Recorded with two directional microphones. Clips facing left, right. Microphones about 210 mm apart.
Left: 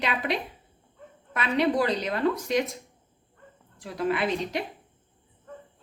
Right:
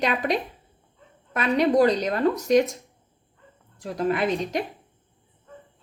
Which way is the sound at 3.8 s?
40° right (ahead or behind).